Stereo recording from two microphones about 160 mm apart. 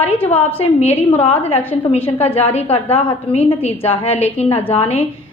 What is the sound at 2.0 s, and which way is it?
A woman's voice, 40° left (ahead or behind).